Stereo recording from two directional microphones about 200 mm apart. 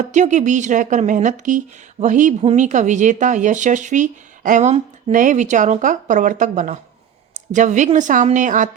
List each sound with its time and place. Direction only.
0.0 s speech: 35° right (ahead or behind)